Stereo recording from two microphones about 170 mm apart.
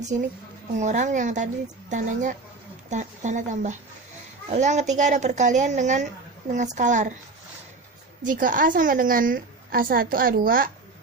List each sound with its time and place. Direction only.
0.8 s speech: 45° right (ahead or behind)
8.2 s a woman's voice: 50° right (ahead or behind)